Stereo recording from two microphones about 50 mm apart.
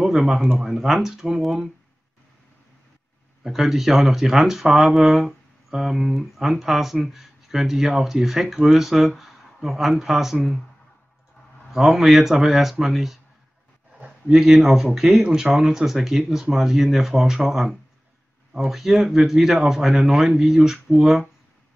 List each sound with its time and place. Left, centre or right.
0.0 s speech: centre
3.4 s speech: centre
11.7 s speech: centre
13.9 s a sound: right
14.3 s speech: centre
15.2 s speech: centre
15.5 s speech: centre